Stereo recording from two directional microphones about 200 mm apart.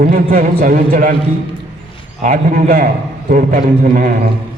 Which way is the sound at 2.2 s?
45° right (ahead or behind).